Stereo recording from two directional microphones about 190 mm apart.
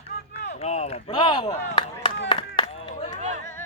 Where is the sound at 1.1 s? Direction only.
25° left (ahead or behind).